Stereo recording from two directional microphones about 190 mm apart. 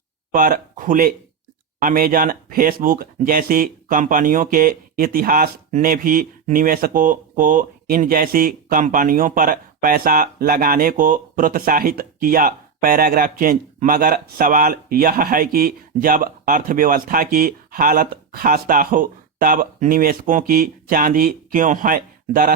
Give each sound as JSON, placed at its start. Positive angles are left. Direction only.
{"t": 0.3, "sound": "speech", "side_deg": -45}